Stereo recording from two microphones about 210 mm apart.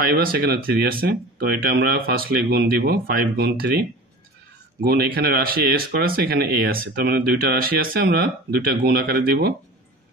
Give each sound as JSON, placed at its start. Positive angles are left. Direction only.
{"t": 0.0, "sound": "speech", "side_deg": -45}
{"t": 4.8, "sound": "speech", "side_deg": -50}